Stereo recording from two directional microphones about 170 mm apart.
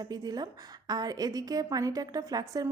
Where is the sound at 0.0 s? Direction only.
20° right (ahead or behind).